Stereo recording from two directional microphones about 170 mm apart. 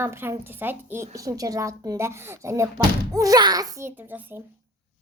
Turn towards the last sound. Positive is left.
turn(degrees=-15)  # may be behind; listen again after turning